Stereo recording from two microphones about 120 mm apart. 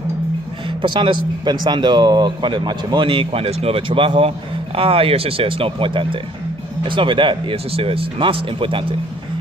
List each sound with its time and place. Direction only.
0.8 s a man's voice: 40° right (ahead or behind)